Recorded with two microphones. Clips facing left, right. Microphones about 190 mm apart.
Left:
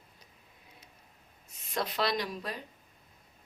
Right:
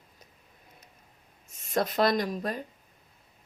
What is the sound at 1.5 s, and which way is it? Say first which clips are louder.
A woman's voice: right 6 dB; 45° right (ahead or behind).